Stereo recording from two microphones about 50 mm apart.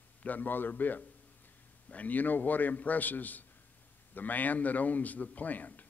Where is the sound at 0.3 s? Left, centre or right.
Left.